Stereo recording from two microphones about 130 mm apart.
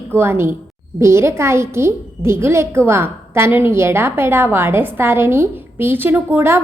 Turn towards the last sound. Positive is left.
turn(degrees=-15)  # may be behind; listen again after turning